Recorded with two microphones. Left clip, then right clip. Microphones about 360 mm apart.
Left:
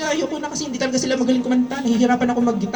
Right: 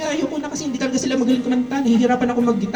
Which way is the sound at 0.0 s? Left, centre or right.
Centre.